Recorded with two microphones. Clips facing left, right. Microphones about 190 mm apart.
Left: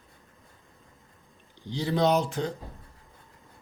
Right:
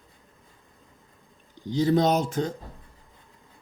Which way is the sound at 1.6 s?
45° right (ahead or behind).